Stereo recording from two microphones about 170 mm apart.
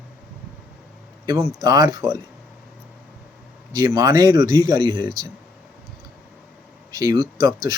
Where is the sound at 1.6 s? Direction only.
25° right (ahead or behind).